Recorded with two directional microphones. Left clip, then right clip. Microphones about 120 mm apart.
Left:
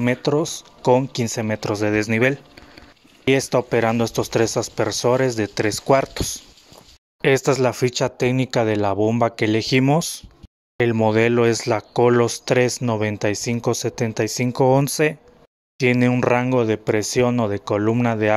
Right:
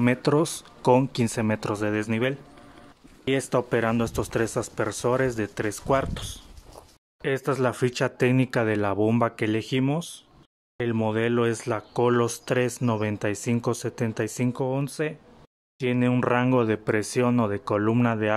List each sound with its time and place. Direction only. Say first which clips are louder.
0.0 s speech: left 3 dB; 5° left (ahead or behind)
0.3 s speech: left 2 dB; 10° right (ahead or behind)
0.8 s speech: left 3 dB; 5° left (ahead or behind)
1.7 s speech: left 6 dB; 20° left (ahead or behind)
3.3 s speech: left 6 dB; 30° left (ahead or behind)
7.2 s speech: left 10 dB; 60° left (ahead or behind)
7.4 s speech: left 6 dB; 30° left (ahead or behind)
7.7 s speech: left 5 dB; 15° left (ahead or behind)
9.4 s speech: left 7 dB; 25° left (ahead or behind)
11.1 s speech: left 7 dB; 35° left (ahead or behind); by 14.5 s 20° left (ahead or behind)
14.9 s speech: left 10 dB; 60° left (ahead or behind)
15.8 s speech: left 7 dB; 40° left (ahead or behind)
16.2 s speech: left 4 dB; 20° left (ahead or behind)